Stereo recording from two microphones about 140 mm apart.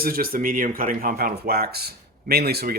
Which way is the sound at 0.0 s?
90° right.